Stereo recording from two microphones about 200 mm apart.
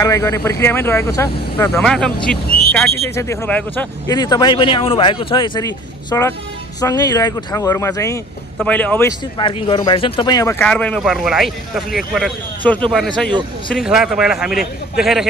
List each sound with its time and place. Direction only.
0.0 s speech: 15° left (ahead or behind)
3.2 s speech: 10° left (ahead or behind)
4.1 s speech: 20° left (ahead or behind)
9.4 s a man's voice: 25° left (ahead or behind); by 15.2 s centre (ahead or behind)